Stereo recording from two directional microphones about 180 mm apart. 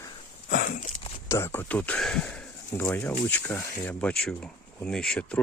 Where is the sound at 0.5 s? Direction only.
50° left (ahead or behind).